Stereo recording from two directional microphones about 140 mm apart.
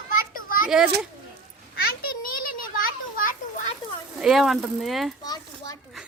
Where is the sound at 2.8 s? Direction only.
90° left.